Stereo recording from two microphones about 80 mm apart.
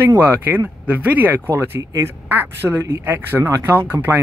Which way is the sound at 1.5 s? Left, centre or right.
Right.